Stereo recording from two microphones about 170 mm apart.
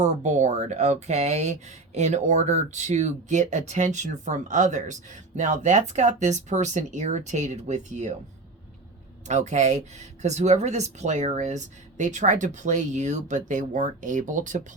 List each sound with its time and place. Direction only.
0.0 s speech: 45° right (ahead or behind)
9.2 s speech: 45° right (ahead or behind)